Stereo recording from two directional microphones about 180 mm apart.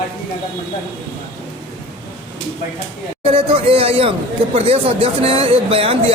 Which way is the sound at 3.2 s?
30° right (ahead or behind).